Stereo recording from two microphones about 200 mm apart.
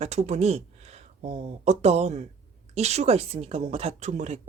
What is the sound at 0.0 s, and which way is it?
Speech, 35° right (ahead or behind).